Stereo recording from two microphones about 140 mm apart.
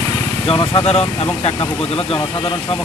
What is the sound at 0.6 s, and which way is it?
Speech, 40° left (ahead or behind).